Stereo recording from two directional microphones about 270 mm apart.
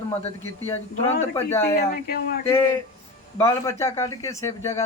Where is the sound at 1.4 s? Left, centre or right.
Centre.